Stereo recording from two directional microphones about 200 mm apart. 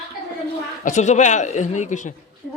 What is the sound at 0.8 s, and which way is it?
Speech, 35° left (ahead or behind).